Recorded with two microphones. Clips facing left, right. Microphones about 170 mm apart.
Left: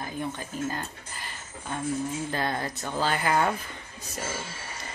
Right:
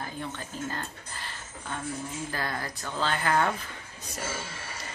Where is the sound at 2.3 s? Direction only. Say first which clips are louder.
Left 4 dB; 25° left (ahead or behind).